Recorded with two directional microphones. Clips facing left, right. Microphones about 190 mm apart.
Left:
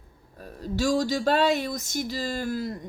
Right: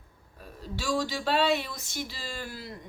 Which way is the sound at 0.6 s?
40° left (ahead or behind).